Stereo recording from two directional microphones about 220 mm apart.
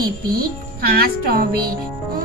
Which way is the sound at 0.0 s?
45° right (ahead or behind).